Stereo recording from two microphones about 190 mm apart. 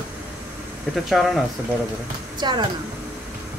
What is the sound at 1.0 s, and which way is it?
Speech, centre (ahead or behind).